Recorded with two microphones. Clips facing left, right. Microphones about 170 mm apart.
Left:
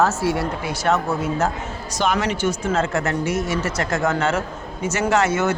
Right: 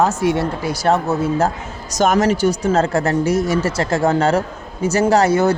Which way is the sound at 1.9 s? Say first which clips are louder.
Right 6 dB; 45° right (ahead or behind).